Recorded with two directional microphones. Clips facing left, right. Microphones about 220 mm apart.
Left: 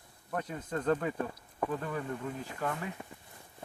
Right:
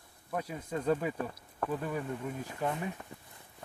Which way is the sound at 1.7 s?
10° right (ahead or behind).